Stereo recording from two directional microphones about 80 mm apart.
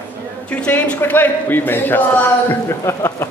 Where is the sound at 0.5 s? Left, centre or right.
Centre; by 3.3 s left.